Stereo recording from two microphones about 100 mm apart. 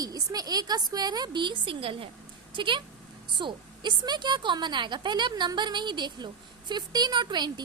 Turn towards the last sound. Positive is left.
turn(degrees=-45)  # may be behind; listen again after turning